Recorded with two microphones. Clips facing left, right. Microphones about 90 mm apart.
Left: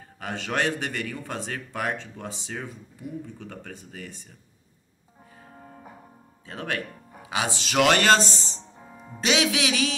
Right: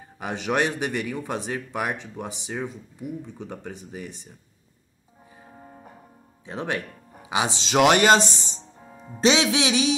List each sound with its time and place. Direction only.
0.0 s speech: 15° right (ahead or behind)
6.4 s speech: 20° right (ahead or behind)
8.7 s music: 10° left (ahead or behind)
9.2 s speech: 30° right (ahead or behind)